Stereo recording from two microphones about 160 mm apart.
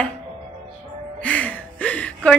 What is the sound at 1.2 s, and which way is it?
Speech, 10° left (ahead or behind).